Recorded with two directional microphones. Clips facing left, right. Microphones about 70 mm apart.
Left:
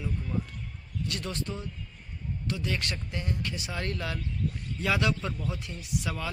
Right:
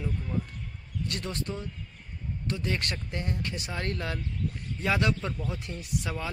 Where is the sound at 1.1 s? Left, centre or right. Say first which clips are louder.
Even; right.